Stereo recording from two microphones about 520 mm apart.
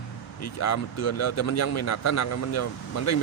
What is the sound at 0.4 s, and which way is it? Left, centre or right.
Speech, left.